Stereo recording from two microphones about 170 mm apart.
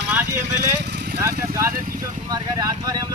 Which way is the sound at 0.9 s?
75° right (ahead or behind).